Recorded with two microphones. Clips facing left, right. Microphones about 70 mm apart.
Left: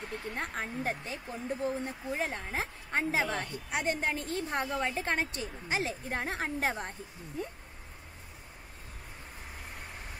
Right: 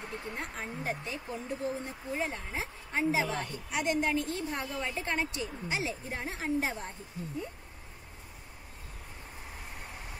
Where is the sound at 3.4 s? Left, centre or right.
Left.